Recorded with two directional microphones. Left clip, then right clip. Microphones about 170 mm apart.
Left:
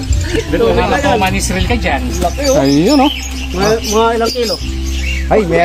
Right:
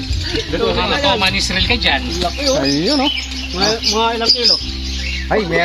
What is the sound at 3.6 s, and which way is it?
Speech, 15° right (ahead or behind).